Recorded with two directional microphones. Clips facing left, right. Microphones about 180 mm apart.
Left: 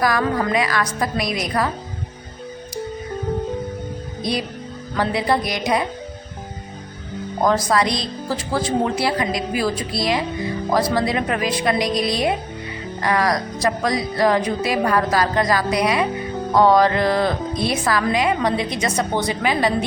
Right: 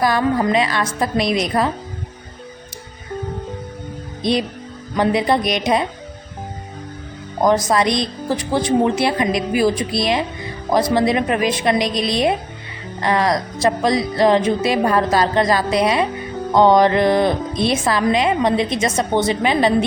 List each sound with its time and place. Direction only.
0.0 s a woman's voice: 25° right (ahead or behind)
4.2 s a woman's voice: 20° right (ahead or behind)
7.4 s a woman's voice: 20° right (ahead or behind)